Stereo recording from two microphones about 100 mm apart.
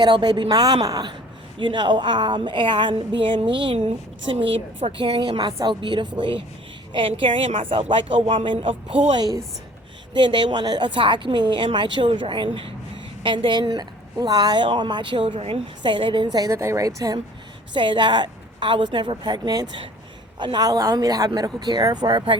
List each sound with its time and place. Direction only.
0.0 s a woman's voice: 45° right (ahead or behind)
1.5 s a woman's voice: 55° right (ahead or behind)
3.8 s a woman's voice: 85° right; by 9.0 s 60° right (ahead or behind)
9.1 s speech: 40° right (ahead or behind)
10.2 s a woman's voice: 55° right (ahead or behind)
12.5 s speech: 70° right (ahead or behind)
13.2 s a woman's voice: 55° right (ahead or behind); by 15.6 s 75° right (ahead or behind)
15.8 s a woman's voice: 55° right (ahead or behind)
16.4 s speech: 30° right (ahead or behind)
17.7 s a woman's voice: 55° right (ahead or behind)